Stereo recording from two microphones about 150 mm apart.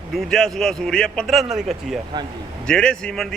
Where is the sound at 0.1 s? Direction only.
5° left (ahead or behind).